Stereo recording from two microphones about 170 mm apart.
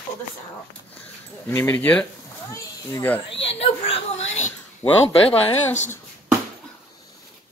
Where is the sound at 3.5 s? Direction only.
35° left (ahead or behind).